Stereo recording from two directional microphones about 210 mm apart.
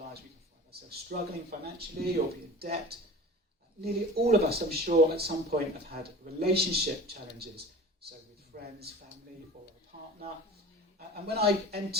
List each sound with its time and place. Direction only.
1.1 s a man's voice: 45° right (ahead or behind)
11.3 s speech: 50° right (ahead or behind)